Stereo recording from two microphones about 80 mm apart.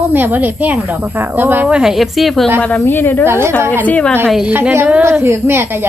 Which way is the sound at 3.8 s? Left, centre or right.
Centre.